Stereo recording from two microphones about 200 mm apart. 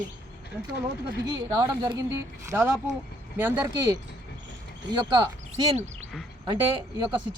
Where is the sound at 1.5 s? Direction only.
20° right (ahead or behind).